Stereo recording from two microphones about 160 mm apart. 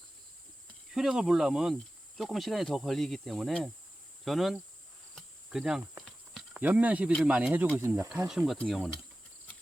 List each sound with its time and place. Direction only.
0.9 s speech: 5° right (ahead or behind)
5.1 s cricket: 5° right (ahead or behind)
6.5 s speech: 10° right (ahead or behind)
8.3 s speech: 5° right (ahead or behind)